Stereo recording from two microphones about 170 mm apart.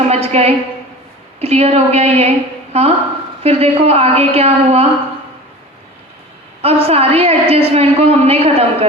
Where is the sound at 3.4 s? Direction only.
35° right (ahead or behind).